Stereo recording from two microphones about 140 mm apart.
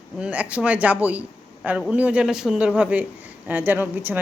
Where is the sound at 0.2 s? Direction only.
10° right (ahead or behind).